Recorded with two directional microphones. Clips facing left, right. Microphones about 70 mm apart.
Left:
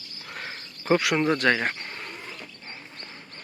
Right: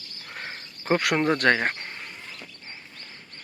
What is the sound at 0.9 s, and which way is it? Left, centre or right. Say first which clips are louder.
Speech: even; right.